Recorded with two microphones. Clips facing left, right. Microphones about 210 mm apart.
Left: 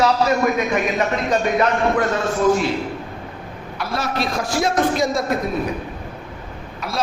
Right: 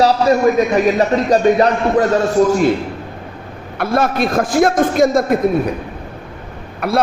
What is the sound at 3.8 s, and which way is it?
A man's voice, 50° right (ahead or behind).